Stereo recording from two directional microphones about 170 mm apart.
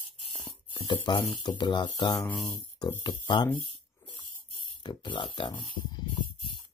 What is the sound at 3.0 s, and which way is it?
Speech, 25° left (ahead or behind).